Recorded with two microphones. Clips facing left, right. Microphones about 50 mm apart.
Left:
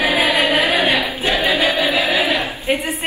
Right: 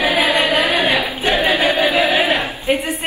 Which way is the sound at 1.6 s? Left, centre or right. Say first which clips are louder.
Right 2 dB; right.